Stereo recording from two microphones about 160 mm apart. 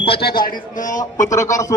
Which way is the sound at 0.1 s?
75° left (ahead or behind).